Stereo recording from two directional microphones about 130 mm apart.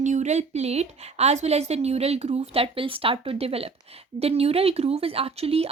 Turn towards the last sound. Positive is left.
turn(degrees=-50)  # may be behind; listen again after turning